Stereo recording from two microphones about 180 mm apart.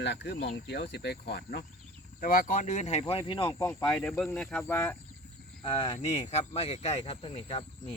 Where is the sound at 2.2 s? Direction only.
55° left (ahead or behind).